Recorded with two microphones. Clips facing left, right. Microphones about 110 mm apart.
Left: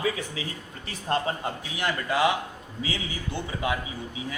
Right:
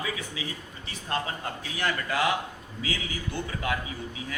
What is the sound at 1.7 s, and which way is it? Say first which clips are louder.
Speech: left 1 dB; 20° left (ahead or behind).